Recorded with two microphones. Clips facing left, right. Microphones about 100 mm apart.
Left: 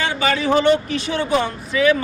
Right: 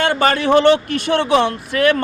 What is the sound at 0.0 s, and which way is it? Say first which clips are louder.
Speech: right 4 dB; 55° right (ahead or behind).